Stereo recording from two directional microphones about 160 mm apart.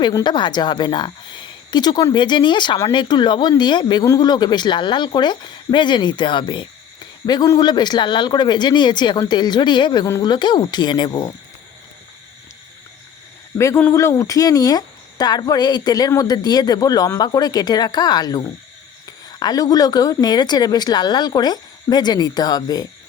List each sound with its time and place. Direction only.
0.0 s speech: 25° left (ahead or behind)
13.6 s speech: 15° left (ahead or behind)